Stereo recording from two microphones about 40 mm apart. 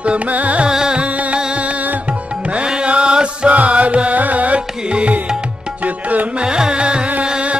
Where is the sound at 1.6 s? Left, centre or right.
Right.